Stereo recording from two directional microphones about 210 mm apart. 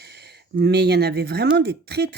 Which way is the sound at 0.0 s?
50° right (ahead or behind).